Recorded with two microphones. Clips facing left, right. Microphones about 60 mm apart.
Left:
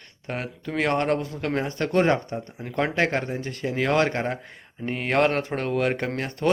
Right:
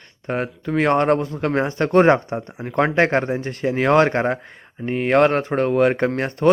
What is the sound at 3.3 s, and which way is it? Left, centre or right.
Speech, right.